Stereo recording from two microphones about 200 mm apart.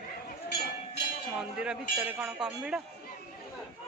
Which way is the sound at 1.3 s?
5° right (ahead or behind).